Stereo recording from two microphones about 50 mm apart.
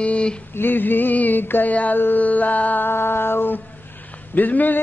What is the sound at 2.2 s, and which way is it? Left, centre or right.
Music, left.